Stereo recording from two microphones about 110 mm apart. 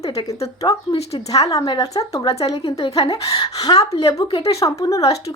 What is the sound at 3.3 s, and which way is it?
Speech, 35° left (ahead or behind).